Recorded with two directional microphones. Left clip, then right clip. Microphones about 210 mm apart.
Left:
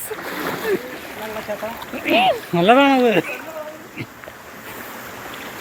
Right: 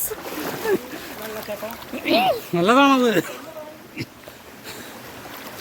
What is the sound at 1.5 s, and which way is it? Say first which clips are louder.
Speech: left 4 dB; 30° right (ahead or behind).